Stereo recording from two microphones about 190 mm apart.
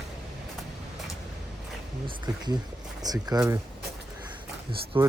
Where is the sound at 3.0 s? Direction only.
20° right (ahead or behind).